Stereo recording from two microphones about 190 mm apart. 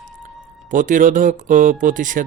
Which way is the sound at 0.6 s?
40° right (ahead or behind).